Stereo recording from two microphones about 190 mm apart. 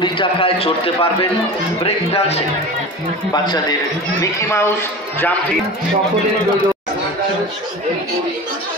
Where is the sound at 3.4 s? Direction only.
20° left (ahead or behind).